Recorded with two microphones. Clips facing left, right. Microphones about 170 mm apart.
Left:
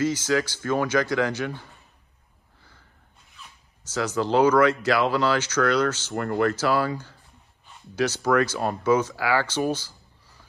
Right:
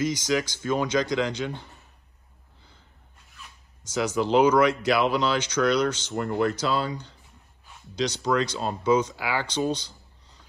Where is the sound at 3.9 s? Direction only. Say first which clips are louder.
Even; 15° right (ahead or behind).